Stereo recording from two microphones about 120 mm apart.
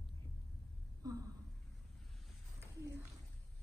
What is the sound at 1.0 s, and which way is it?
Speech, 30° right (ahead or behind).